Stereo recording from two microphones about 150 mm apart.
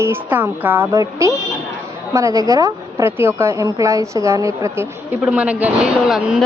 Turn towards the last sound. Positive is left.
turn(degrees=-5)  # may be behind; listen again after turning